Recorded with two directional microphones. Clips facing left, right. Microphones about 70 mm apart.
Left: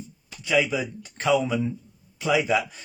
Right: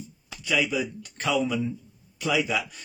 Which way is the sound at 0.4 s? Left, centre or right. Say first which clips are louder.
Left 3 dB; left.